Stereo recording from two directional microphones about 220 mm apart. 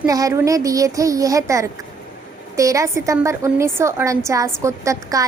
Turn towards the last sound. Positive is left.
turn(degrees=-15)  # may be behind; listen again after turning